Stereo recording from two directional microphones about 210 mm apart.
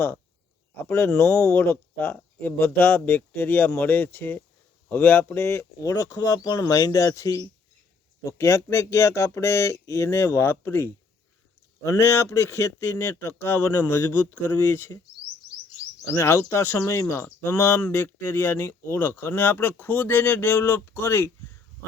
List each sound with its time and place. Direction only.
0.8 s speech: 10° left (ahead or behind)
16.1 s speech: 10° left (ahead or behind)